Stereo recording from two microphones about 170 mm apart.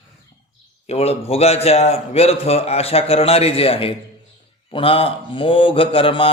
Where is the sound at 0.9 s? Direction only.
35° left (ahead or behind).